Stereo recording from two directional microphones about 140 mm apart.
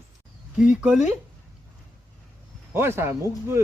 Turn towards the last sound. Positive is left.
turn(degrees=-20)  # may be behind; listen again after turning